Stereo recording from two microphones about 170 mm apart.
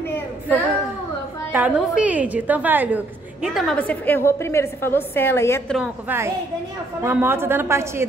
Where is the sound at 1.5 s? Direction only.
10° right (ahead or behind).